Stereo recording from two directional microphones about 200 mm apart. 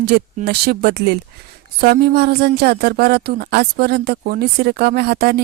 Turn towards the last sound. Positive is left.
turn(degrees=-55)  # may be behind; listen again after turning